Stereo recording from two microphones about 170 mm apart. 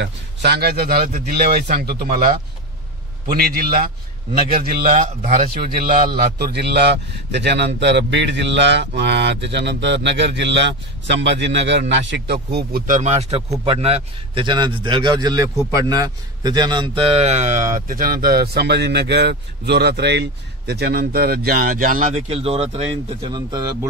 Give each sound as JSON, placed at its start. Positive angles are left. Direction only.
{"t": 0.0, "sound": "a man's voice", "side_deg": -75}
{"t": 3.3, "sound": "a man's voice", "side_deg": -60}
{"t": 22.1, "sound": "speech", "side_deg": -35}